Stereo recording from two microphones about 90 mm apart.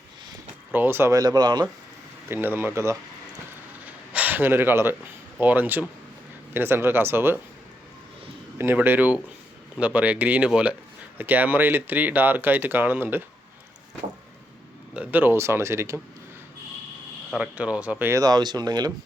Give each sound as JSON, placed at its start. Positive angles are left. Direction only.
{"t": 0.7, "sound": "speech", "side_deg": -25}
{"t": 1.1, "sound": "speech", "side_deg": -45}
{"t": 2.3, "sound": "speech", "side_deg": -25}
{"t": 3.8, "sound": "gasp", "side_deg": -20}
{"t": 5.4, "sound": "speech", "side_deg": -20}
{"t": 8.5, "sound": "speech", "side_deg": -25}
{"t": 14.9, "sound": "speech", "side_deg": -20}
{"t": 17.3, "sound": "speech", "side_deg": -15}
{"t": 18.2, "sound": "speech", "side_deg": -50}